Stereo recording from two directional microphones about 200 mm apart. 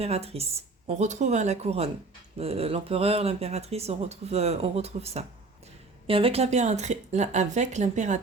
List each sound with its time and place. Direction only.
0.0 s speech: 30° right (ahead or behind)